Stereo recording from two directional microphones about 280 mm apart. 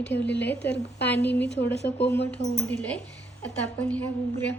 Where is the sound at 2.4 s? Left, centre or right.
Left.